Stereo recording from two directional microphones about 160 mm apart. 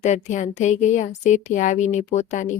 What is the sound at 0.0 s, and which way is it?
A woman's voice, 45° left (ahead or behind).